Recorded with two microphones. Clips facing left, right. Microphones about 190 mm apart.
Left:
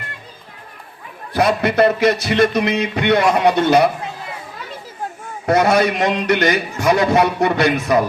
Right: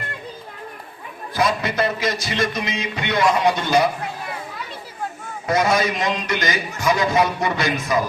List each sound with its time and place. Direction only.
1.3 s music: 65° left (ahead or behind)
5.5 s music: 60° left (ahead or behind)